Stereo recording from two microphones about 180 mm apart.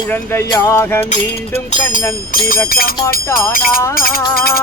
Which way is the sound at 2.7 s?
55° left (ahead or behind).